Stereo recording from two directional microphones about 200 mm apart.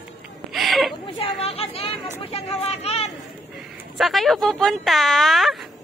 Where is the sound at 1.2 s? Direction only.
30° left (ahead or behind).